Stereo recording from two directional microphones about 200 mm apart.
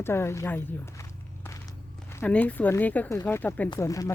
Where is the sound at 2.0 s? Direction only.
10° left (ahead or behind).